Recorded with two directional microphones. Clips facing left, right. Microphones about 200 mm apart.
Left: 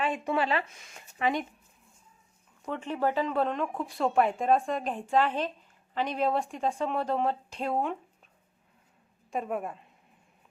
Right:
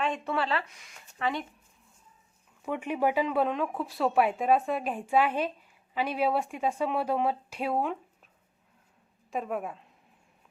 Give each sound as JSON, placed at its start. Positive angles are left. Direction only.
{"t": 0.3, "sound": "speech", "side_deg": 15}
{"t": 2.6, "sound": "speech", "side_deg": -10}
{"t": 9.3, "sound": "a woman's voice", "side_deg": 0}